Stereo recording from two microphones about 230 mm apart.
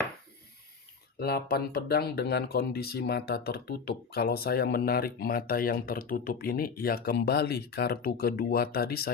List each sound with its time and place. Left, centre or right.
1.2 s speech: left